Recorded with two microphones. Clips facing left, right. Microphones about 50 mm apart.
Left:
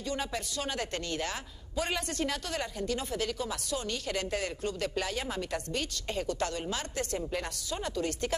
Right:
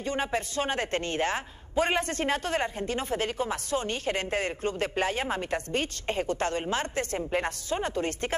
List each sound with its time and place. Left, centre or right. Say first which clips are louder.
0.0 s a woman's voice: right 5 dB; right